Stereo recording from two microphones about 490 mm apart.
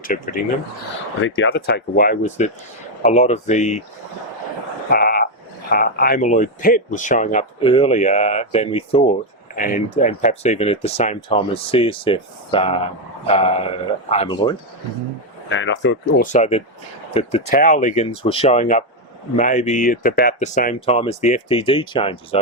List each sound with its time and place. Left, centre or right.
0.0 s speech: centre
4.9 s speech: centre
15.4 s speech: left